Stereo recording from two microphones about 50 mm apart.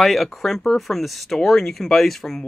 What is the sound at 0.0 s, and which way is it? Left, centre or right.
Speech, centre.